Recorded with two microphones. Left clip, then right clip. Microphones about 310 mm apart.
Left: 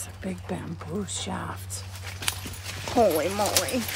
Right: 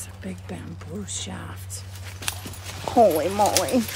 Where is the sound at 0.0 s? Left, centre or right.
Centre.